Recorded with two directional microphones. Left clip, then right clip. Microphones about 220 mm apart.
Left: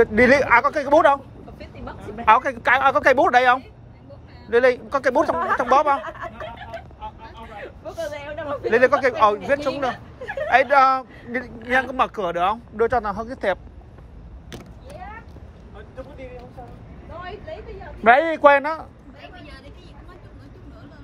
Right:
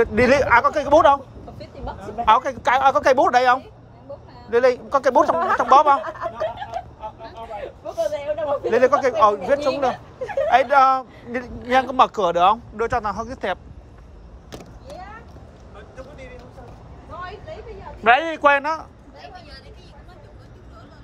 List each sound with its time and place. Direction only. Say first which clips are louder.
0.0 s speech: left 1 dB; 10° right (ahead or behind)
6.0 s speech: right 4 dB; 30° right (ahead or behind)
8.0 s a man's voice: right 7 dB; centre (ahead or behind)
8.6 s a man's voice: left 1 dB; 15° right (ahead or behind)
12.7 s speech: left 2 dB; 15° right (ahead or behind)
18.0 s a man's voice: left 2 dB; centre (ahead or behind)